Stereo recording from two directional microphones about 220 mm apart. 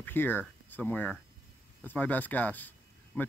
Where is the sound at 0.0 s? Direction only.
10° left (ahead or behind).